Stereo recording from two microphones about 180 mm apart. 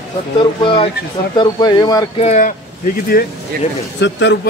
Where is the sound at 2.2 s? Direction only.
40° left (ahead or behind).